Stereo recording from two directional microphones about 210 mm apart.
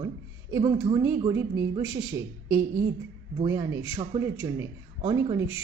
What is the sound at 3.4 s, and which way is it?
Speech, 20° right (ahead or behind).